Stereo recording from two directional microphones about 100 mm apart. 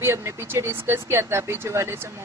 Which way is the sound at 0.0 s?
30° right (ahead or behind).